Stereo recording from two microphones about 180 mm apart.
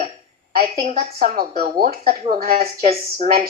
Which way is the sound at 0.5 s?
55° right (ahead or behind).